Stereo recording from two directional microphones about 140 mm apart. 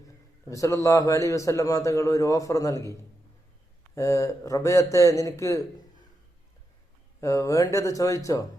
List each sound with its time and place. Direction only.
0.4 s a man's voice: 20° left (ahead or behind)
7.2 s a man's voice: 20° left (ahead or behind)